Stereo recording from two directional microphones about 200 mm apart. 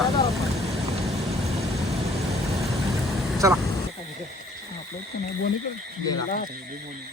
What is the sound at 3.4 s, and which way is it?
Speech, 15° right (ahead or behind).